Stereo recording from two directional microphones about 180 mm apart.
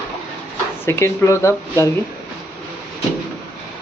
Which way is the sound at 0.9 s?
15° left (ahead or behind).